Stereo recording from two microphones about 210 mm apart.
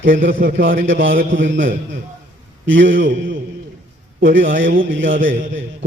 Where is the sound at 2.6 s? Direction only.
65° right (ahead or behind).